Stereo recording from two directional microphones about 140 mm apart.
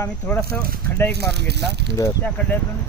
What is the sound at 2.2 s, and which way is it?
Speech, 10° left (ahead or behind).